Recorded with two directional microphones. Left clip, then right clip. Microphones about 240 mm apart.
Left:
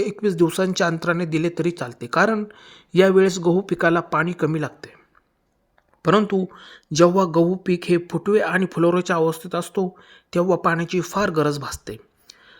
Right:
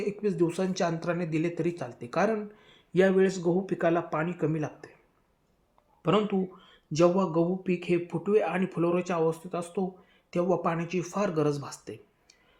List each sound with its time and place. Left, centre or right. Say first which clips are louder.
0.0 s speech: left 8 dB; left
6.0 s speech: left 8 dB; left